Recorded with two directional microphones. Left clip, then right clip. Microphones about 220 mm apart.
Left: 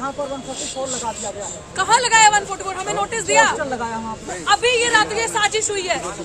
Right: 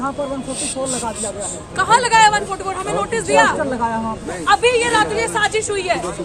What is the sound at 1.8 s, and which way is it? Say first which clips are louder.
A woman's voice: right 2 dB; 10° left (ahead or behind).